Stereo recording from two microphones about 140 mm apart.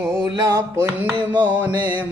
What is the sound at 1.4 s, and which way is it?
Music, 10° right (ahead or behind).